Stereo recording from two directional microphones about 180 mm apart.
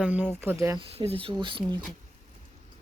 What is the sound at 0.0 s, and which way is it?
Speech, 10° right (ahead or behind).